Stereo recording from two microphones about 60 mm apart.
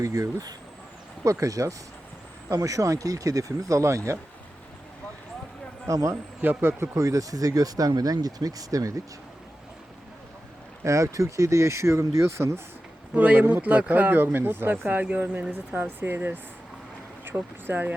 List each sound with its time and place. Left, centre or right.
0.0 s speech: right
1.2 s speech: right
5.9 s speech: right
6.4 s speech: right
6.9 s speech: right
10.8 s speech: right
13.1 s speech: right